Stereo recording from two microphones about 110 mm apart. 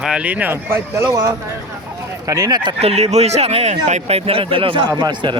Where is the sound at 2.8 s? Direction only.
70° right (ahead or behind); by 4.8 s 50° right (ahead or behind).